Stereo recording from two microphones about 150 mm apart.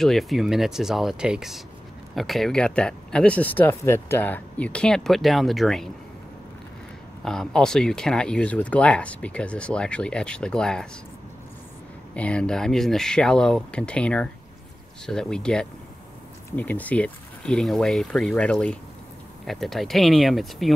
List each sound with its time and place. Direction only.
0.0 s speech: centre (ahead or behind)
7.2 s speech: 5° left (ahead or behind)
12.1 s speech: 5° left (ahead or behind)